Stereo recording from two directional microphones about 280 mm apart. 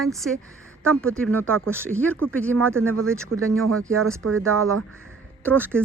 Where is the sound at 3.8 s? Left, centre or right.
Right.